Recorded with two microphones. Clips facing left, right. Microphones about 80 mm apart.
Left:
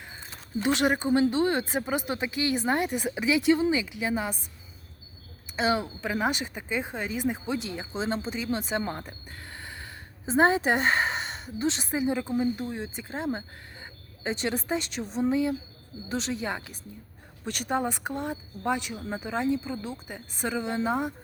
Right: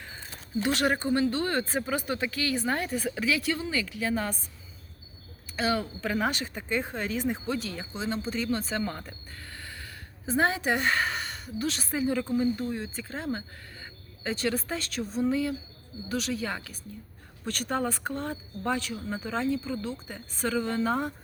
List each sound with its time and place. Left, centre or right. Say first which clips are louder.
0.6 s speech: left 2 dB; centre
5.5 s speech: left 2 dB; left
5.8 s speech: even; centre; by 8.3 s left
8.4 s speech: left 4 dB; centre